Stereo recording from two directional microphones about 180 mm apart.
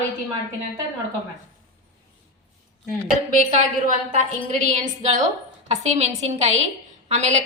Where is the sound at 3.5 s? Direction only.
40° right (ahead or behind).